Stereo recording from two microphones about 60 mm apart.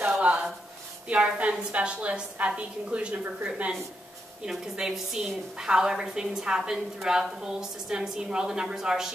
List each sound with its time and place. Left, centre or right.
0.2 s a sound: centre
1.0 s a woman's voice: centre
4.5 s a woman's voice: centre